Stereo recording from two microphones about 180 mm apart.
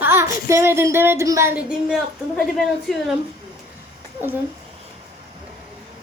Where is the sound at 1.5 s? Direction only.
5° right (ahead or behind).